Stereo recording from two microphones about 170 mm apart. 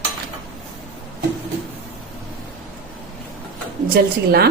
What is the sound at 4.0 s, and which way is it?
Speech, 65° right (ahead or behind).